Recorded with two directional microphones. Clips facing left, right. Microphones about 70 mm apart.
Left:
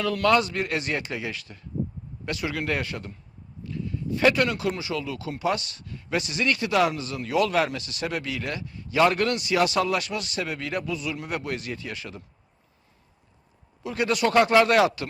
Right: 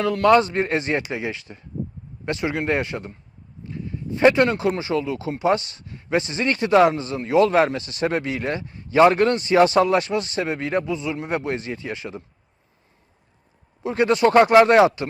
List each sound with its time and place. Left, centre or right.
0.0 s speech: right
13.8 s speech: right